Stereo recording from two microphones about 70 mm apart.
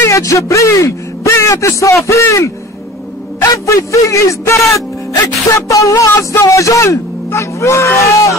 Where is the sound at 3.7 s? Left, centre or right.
Left.